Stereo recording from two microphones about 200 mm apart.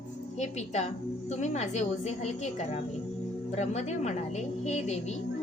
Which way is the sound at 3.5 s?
35° left (ahead or behind).